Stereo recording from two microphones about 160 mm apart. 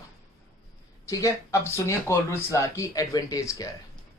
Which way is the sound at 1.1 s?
20° left (ahead or behind).